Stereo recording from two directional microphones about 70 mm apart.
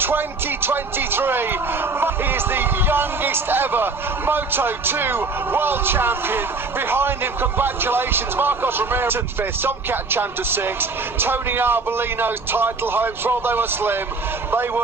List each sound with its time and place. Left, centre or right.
0.0 s a man's voice: right